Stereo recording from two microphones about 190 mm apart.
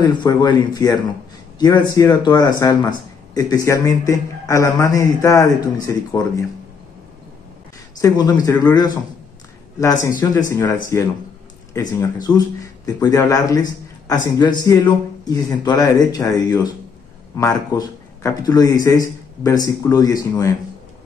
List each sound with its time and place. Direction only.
0.0 s a man's voice: 20° left (ahead or behind)
8.0 s a man's voice: 20° left (ahead or behind)